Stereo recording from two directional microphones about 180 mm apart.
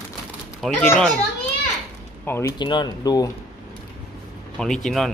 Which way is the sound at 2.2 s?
15° left (ahead or behind).